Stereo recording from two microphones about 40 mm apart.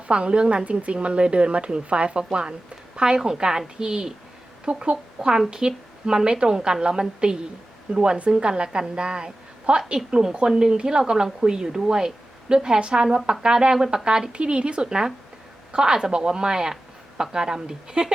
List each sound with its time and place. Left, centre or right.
0.1 s a woman's voice: right